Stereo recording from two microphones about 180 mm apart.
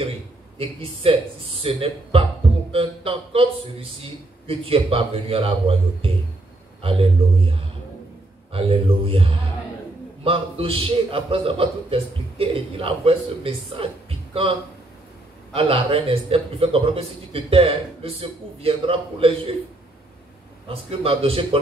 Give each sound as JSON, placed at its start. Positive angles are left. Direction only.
{"t": 0.6, "sound": "a man's voice", "side_deg": -30}
{"t": 2.7, "sound": "music", "side_deg": -30}
{"t": 4.0, "sound": "a man's voice", "side_deg": -30}
{"t": 15.5, "sound": "a man's voice", "side_deg": -30}
{"t": 20.6, "sound": "a man's voice", "side_deg": -30}